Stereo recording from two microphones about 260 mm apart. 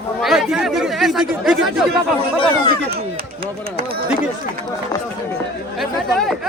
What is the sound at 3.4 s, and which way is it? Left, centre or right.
Speech, right.